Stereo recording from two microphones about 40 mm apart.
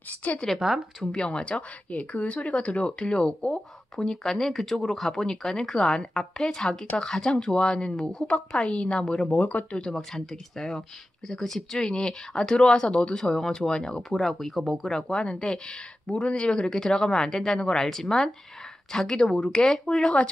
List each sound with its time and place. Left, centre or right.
0.2 s speech: left
0.6 s speech: centre
1.1 s speech: left
3.9 s a woman's voice: centre
9.8 s a woman's voice: centre
14.1 s a woman's voice: centre
16.1 s a woman's voice: left